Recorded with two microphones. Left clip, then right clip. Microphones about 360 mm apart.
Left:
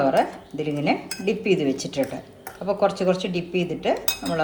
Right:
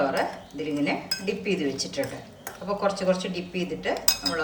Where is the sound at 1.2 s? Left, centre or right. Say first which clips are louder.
Left 5 dB; centre.